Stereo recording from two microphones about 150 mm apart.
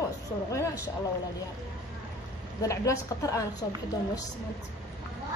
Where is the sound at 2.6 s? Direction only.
20° left (ahead or behind).